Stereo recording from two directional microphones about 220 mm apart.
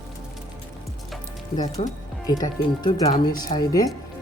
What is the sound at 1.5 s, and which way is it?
Speech, 25° left (ahead or behind).